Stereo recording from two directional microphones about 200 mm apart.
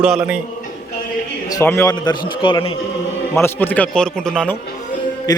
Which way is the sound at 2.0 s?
20° left (ahead or behind).